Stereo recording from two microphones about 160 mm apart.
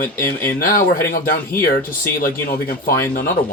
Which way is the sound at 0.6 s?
60° left (ahead or behind).